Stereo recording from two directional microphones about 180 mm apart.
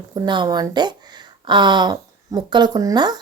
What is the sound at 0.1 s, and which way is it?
Speech, 25° right (ahead or behind).